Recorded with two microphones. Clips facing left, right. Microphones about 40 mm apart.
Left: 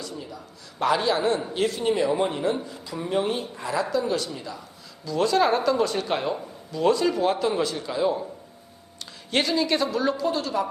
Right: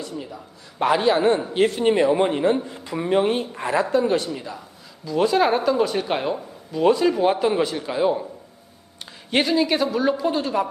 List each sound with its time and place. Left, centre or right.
0.0 s a man's voice: right
9.3 s speech: centre